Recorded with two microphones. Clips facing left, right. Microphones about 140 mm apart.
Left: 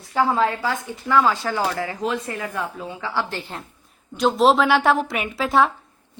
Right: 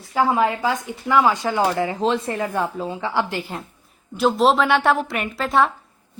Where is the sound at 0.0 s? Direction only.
5° right (ahead or behind); by 3.1 s 30° right (ahead or behind).